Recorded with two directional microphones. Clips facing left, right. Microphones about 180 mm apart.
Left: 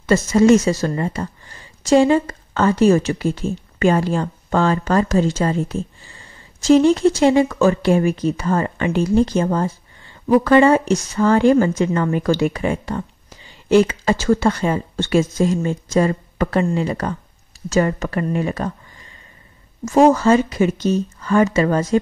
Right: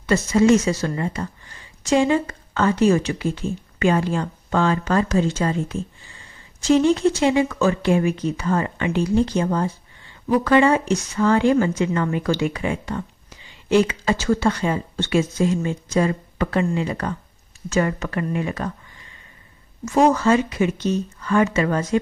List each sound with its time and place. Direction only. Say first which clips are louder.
0.0 s speech: left 3 dB; 45° left (ahead or behind)
19.8 s speech: left 4 dB; 45° left (ahead or behind)